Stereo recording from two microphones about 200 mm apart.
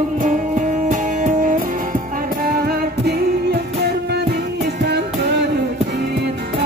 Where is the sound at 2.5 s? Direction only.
50° right (ahead or behind).